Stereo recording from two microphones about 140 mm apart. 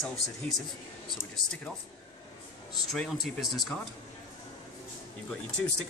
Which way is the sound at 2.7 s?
Centre (ahead or behind).